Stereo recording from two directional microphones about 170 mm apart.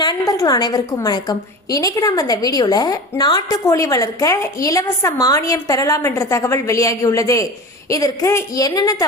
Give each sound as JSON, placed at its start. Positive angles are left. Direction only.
{"t": 0.0, "sound": "a woman's voice", "side_deg": 25}